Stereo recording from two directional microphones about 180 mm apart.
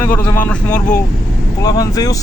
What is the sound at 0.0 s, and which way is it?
Speech, 10° left (ahead or behind).